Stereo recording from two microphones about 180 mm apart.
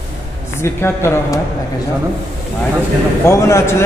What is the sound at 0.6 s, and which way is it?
Speech, 15° left (ahead or behind).